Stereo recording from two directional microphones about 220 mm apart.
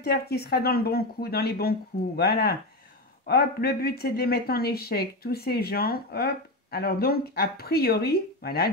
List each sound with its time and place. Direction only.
0.0 s speech: 45° left (ahead or behind)